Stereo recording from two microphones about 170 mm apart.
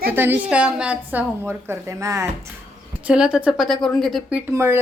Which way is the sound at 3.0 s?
5° right (ahead or behind).